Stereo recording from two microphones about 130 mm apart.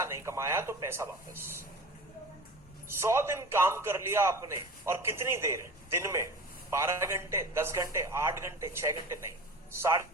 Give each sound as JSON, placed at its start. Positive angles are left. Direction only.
{"t": 0.0, "sound": "a man's voice", "side_deg": -20}
{"t": 3.0, "sound": "a man's voice", "side_deg": -20}